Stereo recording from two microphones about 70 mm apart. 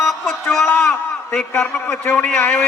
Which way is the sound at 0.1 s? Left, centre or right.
Centre.